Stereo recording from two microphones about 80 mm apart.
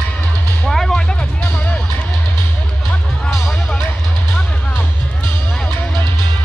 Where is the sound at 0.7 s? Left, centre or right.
Centre.